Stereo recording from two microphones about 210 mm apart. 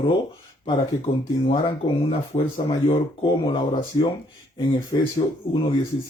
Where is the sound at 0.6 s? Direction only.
25° left (ahead or behind).